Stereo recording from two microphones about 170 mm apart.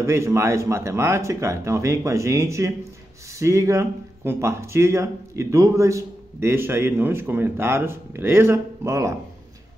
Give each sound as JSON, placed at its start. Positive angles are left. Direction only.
{"t": 0.0, "sound": "speech", "side_deg": -15}